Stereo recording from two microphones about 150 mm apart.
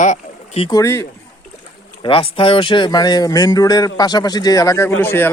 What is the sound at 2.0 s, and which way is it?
Speech, 35° left (ahead or behind).